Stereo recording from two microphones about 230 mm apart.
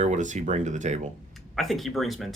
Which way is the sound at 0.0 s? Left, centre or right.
Right.